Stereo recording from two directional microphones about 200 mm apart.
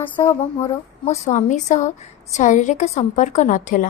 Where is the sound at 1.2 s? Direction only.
35° left (ahead or behind).